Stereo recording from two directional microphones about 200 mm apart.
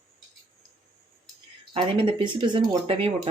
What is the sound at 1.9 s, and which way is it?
Speech, 25° right (ahead or behind).